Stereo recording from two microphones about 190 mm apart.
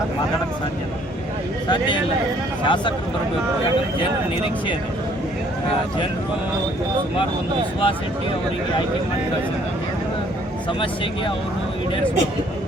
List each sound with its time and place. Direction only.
1.6 s speech: 25° left (ahead or behind)